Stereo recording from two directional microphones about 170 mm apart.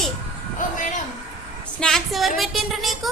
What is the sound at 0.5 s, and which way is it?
Speech, 50° left (ahead or behind).